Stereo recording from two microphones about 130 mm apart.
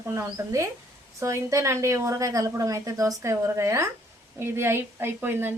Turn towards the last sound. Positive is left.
turn(degrees=-15)  # may be behind; listen again after turning